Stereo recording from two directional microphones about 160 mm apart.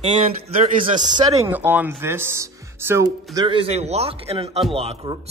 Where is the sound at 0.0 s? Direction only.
40° right (ahead or behind).